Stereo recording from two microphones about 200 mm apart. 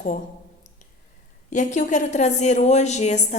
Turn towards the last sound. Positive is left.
turn(degrees=35)  # may be behind; listen again after turning